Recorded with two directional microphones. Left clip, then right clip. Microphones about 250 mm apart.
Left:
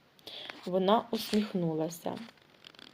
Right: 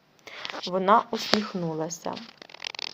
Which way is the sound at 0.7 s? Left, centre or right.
Centre.